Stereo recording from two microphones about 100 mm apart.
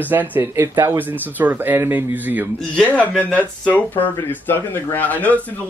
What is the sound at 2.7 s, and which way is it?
Speech, 15° left (ahead or behind).